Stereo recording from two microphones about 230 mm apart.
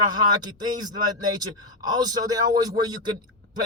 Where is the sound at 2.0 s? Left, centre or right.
Centre.